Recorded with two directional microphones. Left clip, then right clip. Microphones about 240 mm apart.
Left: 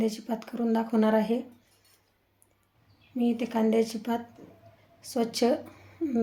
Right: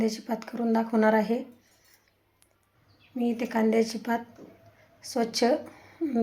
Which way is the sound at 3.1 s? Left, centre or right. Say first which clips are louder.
Even; centre.